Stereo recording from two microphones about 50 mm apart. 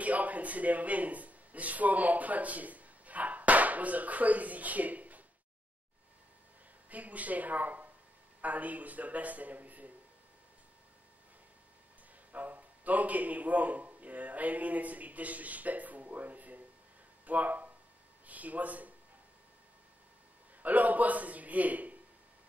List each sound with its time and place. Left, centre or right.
0.0 s speech: right
6.9 s speech: right
12.3 s a man's voice: right
18.2 s a sound: right
20.6 s speech: right